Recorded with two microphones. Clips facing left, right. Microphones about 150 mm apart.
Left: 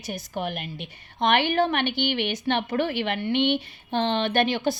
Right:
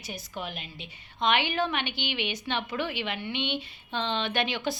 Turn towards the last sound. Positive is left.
turn(degrees=45)  # may be behind; listen again after turning